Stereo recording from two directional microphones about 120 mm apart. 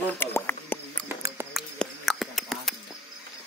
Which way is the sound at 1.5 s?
Centre (ahead or behind).